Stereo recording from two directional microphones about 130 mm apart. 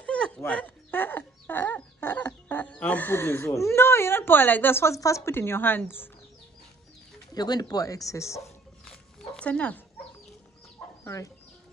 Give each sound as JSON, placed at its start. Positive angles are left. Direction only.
{"t": 0.0, "sound": "dog", "side_deg": 10}
{"t": 0.4, "sound": "chicken", "side_deg": 15}
{"t": 7.3, "sound": "speech", "side_deg": 30}
{"t": 9.4, "sound": "speech", "side_deg": 10}